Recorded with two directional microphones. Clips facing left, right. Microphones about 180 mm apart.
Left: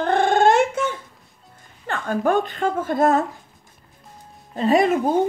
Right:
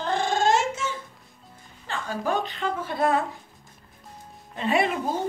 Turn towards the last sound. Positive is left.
turn(degrees=50)  # may be behind; listen again after turning